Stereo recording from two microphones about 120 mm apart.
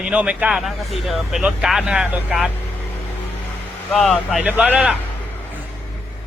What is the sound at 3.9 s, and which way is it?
Speech, centre (ahead or behind).